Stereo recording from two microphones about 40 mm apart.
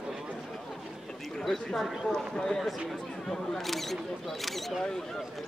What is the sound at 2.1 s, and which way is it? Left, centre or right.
Speech, centre.